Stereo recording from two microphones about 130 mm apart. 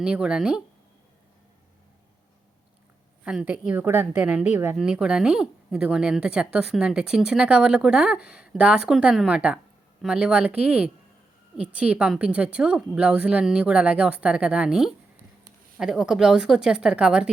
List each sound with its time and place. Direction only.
0.0 s speech: 5° right (ahead or behind)
3.2 s a woman's voice: 10° right (ahead or behind)